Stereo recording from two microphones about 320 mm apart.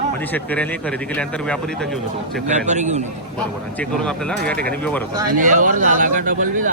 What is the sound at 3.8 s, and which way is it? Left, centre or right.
Speech, centre.